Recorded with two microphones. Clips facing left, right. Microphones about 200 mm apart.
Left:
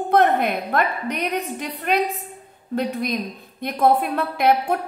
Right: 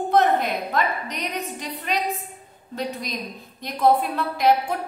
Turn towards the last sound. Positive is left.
turn(degrees=55)  # may be behind; listen again after turning